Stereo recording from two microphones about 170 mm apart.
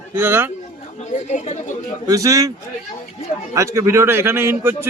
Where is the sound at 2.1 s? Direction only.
20° right (ahead or behind).